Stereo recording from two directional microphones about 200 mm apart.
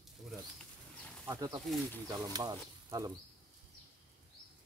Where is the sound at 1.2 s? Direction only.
15° right (ahead or behind).